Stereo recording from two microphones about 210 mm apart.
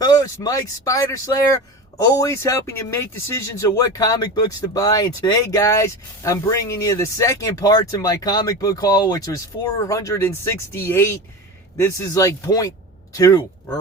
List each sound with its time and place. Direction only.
0.0 s speech: 15° left (ahead or behind)